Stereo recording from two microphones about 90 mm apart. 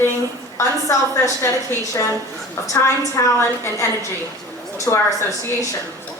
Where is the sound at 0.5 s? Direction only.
35° left (ahead or behind).